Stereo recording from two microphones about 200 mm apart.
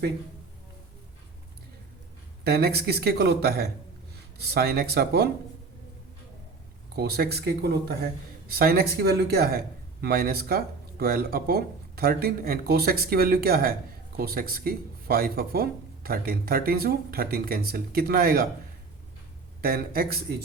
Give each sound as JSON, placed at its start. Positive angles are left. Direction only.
{"t": 2.4, "sound": "a man's voice", "side_deg": -50}
{"t": 6.9, "sound": "a man's voice", "side_deg": -55}
{"t": 19.6, "sound": "a man's voice", "side_deg": -50}